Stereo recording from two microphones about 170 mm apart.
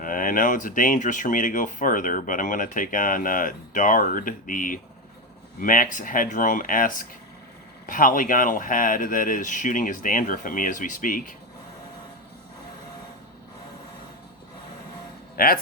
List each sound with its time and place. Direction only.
0.0 s speech: 55° left (ahead or behind)
15.4 s speech: 60° left (ahead or behind)